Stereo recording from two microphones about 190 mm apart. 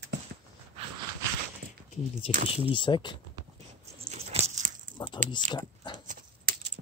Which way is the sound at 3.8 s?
35° right (ahead or behind).